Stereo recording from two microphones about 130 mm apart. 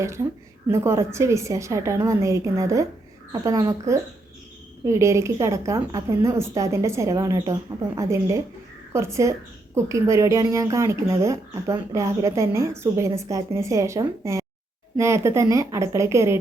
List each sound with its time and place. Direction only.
0.0 s speech: 20° right (ahead or behind)